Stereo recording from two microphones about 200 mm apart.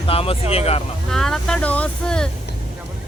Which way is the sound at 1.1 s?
Centre (ahead or behind).